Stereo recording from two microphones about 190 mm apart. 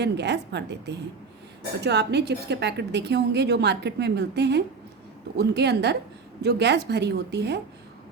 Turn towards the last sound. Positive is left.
turn(degrees=-65)  # may be behind; listen again after turning